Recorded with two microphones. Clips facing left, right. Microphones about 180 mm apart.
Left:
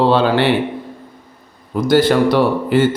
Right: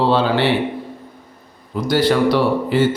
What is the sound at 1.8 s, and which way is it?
A man's voice, 50° left (ahead or behind).